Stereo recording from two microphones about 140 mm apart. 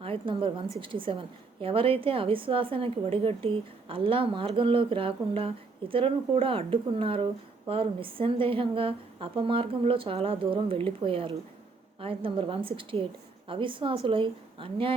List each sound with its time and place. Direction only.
0.0 s a woman's voice: 40° right (ahead or behind)